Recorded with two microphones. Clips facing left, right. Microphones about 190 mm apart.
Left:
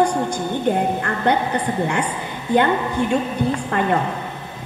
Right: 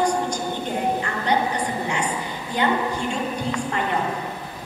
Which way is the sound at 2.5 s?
55° left (ahead or behind).